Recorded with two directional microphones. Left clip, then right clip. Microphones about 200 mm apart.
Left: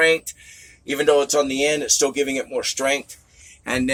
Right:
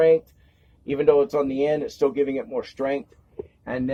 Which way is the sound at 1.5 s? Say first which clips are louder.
Left 3 dB; 15° right (ahead or behind).